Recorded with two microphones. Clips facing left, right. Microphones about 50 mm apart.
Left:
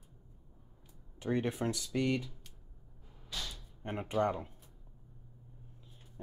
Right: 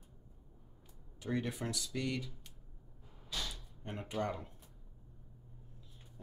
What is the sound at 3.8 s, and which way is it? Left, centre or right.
Speech, left.